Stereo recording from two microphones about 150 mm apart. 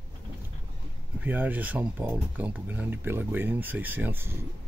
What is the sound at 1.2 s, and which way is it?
Speech, 10° right (ahead or behind).